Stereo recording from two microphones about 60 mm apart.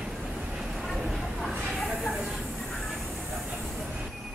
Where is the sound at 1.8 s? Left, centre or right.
Centre.